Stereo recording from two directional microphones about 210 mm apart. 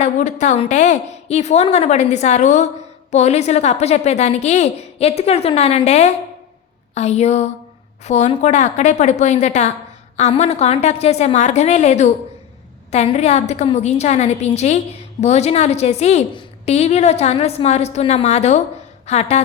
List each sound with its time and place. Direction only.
0.0 s a woman's voice: 35° left (ahead or behind)